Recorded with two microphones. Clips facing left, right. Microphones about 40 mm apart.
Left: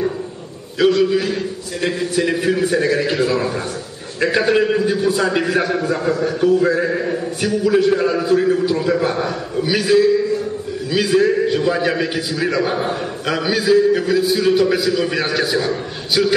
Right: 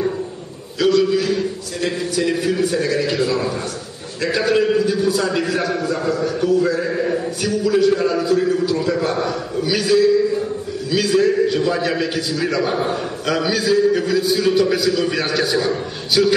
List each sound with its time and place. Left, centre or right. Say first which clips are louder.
0.7 s a man's voice: left 1 dB; centre